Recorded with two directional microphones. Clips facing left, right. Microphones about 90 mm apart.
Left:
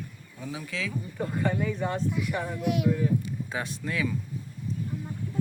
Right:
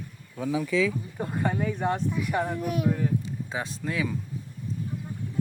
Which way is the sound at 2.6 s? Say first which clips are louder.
Left 1 dB; 40° right (ahead or behind).